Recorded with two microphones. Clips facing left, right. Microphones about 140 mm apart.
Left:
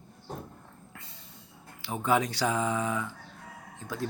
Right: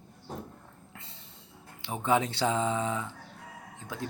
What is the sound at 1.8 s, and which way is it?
Speech, 25° right (ahead or behind).